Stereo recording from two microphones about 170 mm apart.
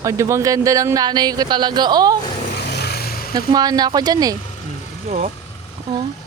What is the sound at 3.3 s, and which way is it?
Speech, 25° right (ahead or behind).